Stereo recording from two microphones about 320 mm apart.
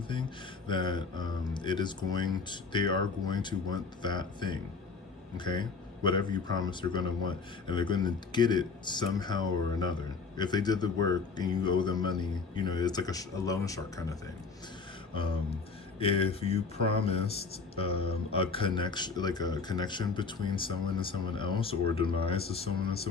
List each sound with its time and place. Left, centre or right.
0.7 s speech: centre
16.0 s speech: centre